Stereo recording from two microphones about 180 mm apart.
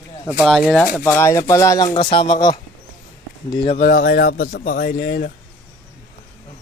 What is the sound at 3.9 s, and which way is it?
Speech, 50° left (ahead or behind).